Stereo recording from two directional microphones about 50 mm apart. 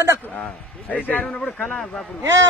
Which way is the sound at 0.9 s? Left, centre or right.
Left.